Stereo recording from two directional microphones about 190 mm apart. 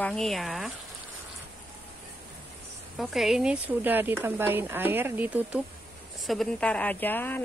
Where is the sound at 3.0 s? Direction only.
Centre (ahead or behind).